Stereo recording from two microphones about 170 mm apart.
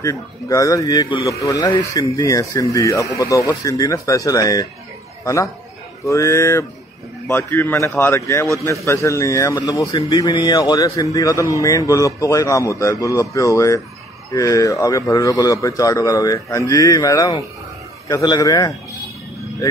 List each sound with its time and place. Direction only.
0.0 s a man's voice: 20° left (ahead or behind)